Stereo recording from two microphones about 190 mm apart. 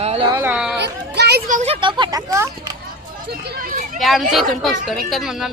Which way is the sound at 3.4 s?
50° right (ahead or behind).